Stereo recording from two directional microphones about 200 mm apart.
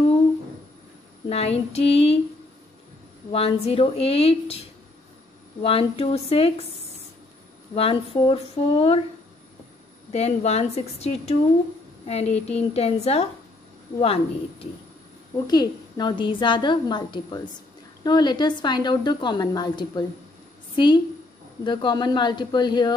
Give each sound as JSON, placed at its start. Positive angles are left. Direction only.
{"t": 1.3, "sound": "a woman's voice", "side_deg": 30}
{"t": 3.3, "sound": "a woman's voice", "side_deg": 30}
{"t": 7.7, "sound": "a woman's voice", "side_deg": 30}
{"t": 10.1, "sound": "a woman's voice", "side_deg": 30}